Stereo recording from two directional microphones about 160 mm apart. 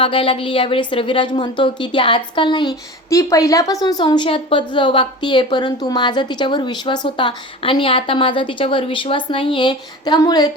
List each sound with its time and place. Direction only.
0.0 s a woman's voice: 35° left (ahead or behind)
3.1 s a woman's voice: 20° left (ahead or behind)